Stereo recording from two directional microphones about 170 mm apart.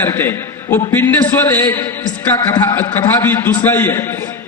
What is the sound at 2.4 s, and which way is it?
A man's voice, 20° left (ahead or behind).